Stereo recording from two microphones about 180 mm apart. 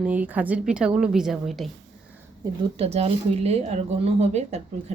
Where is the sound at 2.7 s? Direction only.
35° right (ahead or behind).